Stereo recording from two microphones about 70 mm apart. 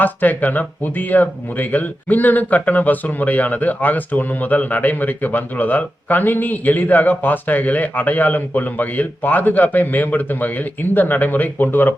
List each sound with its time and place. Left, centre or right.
0.0 s speech: left